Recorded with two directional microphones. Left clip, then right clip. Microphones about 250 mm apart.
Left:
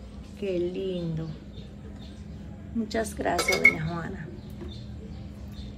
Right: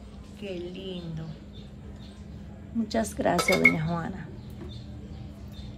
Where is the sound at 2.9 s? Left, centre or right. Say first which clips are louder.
Right 2 dB; right.